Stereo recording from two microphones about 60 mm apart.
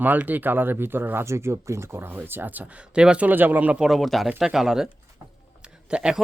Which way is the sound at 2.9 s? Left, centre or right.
Centre.